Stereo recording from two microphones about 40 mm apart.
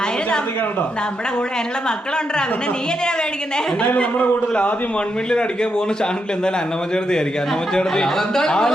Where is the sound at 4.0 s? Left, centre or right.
Left.